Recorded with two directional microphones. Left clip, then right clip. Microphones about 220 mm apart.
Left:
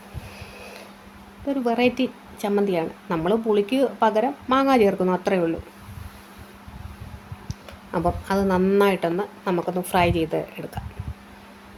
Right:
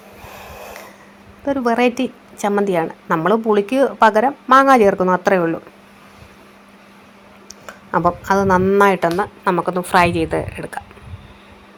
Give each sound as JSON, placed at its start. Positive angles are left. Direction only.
{"t": 0.3, "sound": "a sound", "side_deg": -20}
{"t": 2.0, "sound": "a woman's voice", "side_deg": -20}
{"t": 7.4, "sound": "a woman's voice", "side_deg": -20}